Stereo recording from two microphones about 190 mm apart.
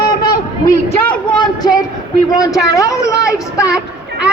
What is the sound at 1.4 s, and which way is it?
A man's voice, 20° left (ahead or behind).